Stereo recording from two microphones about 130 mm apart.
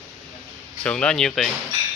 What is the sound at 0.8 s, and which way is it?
Speech, 10° left (ahead or behind).